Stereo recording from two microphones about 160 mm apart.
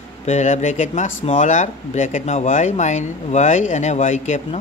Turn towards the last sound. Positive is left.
turn(degrees=45)  # may be behind; listen again after turning